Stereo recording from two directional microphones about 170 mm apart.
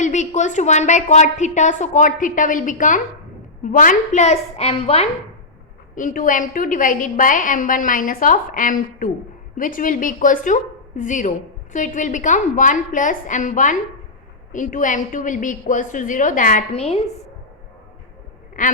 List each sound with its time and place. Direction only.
0.0 s a woman's voice: 45° left (ahead or behind)
5.9 s a woman's voice: 50° left (ahead or behind)
18.6 s a woman's voice: 50° left (ahead or behind)